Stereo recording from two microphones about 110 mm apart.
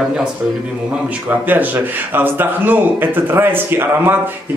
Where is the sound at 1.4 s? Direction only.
15° right (ahead or behind).